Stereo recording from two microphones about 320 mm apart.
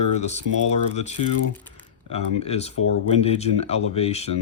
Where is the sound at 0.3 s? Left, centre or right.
Centre.